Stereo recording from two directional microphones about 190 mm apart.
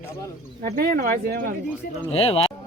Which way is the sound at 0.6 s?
50° right (ahead or behind).